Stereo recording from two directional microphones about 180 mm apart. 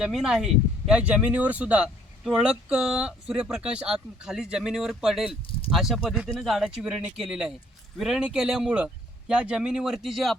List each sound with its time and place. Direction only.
0.0 s speech: centre (ahead or behind)